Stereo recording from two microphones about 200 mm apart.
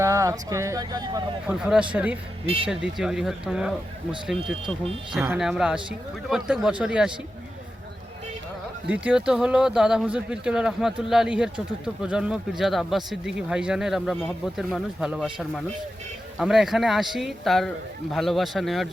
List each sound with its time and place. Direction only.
0.0 s speech: 15° right (ahead or behind)
1.5 s speech: 5° right (ahead or behind)
5.2 s speech: 5° right (ahead or behind)
8.9 s speech: 5° right (ahead or behind)